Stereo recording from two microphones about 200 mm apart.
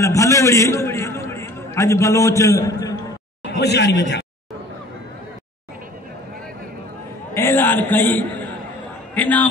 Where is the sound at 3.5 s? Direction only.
55° left (ahead or behind).